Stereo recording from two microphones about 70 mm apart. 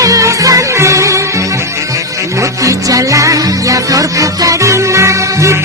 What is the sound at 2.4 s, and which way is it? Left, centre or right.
Music, right.